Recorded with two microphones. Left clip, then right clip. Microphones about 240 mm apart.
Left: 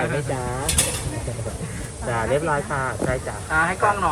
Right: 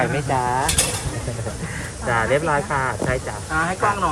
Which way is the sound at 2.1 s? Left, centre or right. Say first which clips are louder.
Right 3 dB; centre.